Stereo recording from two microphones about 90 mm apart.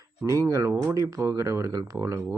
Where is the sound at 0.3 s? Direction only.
35° right (ahead or behind).